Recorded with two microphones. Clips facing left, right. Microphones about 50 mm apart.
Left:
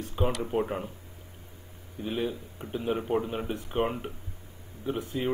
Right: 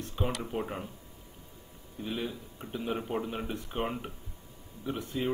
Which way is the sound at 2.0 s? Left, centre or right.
Centre.